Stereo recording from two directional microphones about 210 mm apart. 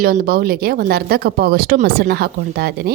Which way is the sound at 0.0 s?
40° right (ahead or behind).